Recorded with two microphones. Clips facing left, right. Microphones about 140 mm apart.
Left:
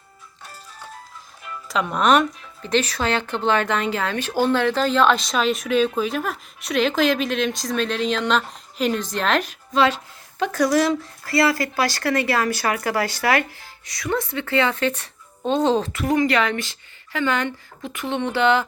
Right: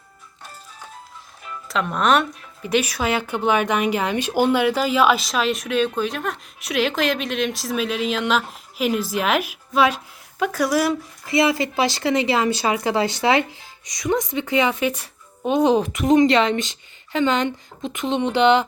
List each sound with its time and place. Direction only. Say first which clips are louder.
1.6 s speech: left 1 dB; centre (ahead or behind); by 18.6 s 20° right (ahead or behind)